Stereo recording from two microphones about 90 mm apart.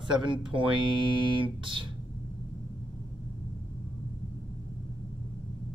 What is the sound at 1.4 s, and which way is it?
Speech, 70° right (ahead or behind).